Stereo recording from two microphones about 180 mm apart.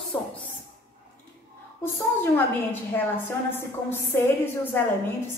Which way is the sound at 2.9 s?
10° left (ahead or behind).